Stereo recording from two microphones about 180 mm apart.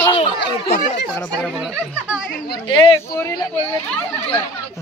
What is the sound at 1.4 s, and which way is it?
Speech, 5° right (ahead or behind).